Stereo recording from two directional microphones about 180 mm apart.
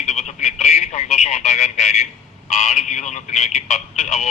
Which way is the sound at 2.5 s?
40° left (ahead or behind).